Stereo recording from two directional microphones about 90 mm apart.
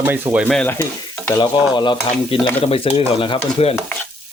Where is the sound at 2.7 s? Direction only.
90° left.